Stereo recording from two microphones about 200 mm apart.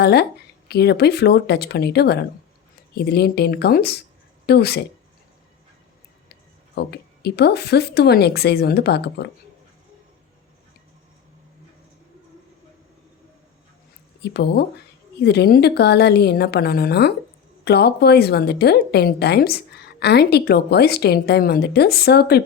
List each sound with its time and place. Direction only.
0.0 s a woman's voice: 55° left (ahead or behind)
6.7 s speech: 55° left (ahead or behind)
14.2 s a woman's voice: 55° left (ahead or behind)